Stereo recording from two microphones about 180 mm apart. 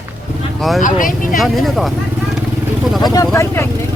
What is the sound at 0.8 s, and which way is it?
Speech, 50° left (ahead or behind).